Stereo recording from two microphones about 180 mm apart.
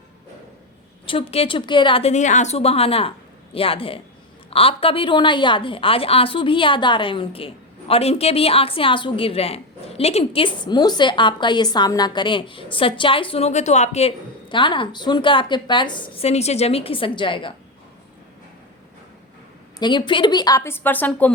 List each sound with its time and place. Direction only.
1.0 s a woman's voice: 30° left (ahead or behind)
14.5 s a woman's voice: 25° left (ahead or behind)
19.8 s a woman's voice: 25° left (ahead or behind); by 21.3 s 10° left (ahead or behind)